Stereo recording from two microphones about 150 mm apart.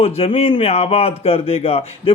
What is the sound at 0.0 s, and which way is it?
Speech, 40° left (ahead or behind).